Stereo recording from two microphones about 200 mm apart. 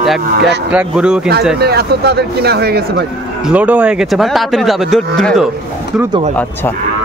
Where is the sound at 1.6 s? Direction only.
50° right (ahead or behind).